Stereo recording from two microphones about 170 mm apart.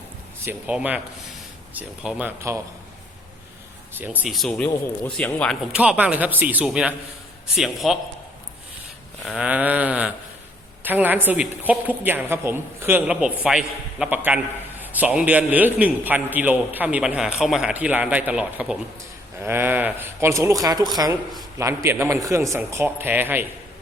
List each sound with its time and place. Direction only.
0.4 s speech: 10° right (ahead or behind)
3.9 s speech: 10° right (ahead or behind); by 5.5 s 5° left (ahead or behind)
5.7 s a woman's voice: 5° right (ahead or behind)
9.2 s a woman's voice: 5° right (ahead or behind)